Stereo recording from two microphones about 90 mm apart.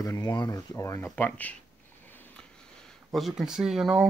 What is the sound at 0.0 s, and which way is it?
Speech, 45° left (ahead or behind).